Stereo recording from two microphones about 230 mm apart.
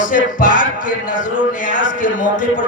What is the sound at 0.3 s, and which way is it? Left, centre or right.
Music, left.